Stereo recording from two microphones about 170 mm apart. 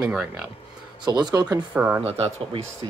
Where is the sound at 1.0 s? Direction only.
25° right (ahead or behind).